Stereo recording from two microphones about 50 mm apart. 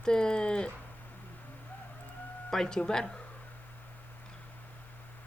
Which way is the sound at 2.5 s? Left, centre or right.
Centre.